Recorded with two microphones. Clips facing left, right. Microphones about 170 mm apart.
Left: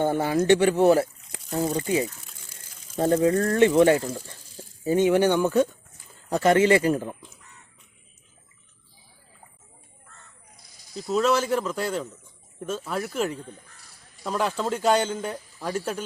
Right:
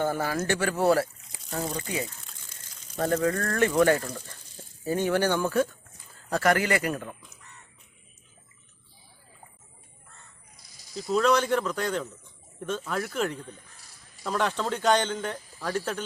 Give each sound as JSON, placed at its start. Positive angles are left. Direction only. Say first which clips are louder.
{"t": 0.0, "sound": "speech", "louder": "left 5 dB", "side_deg": 25}
{"t": 3.0, "sound": "speech", "louder": "left 5 dB", "side_deg": 25}
{"t": 10.9, "sound": "speech", "louder": "left 1 dB", "side_deg": 5}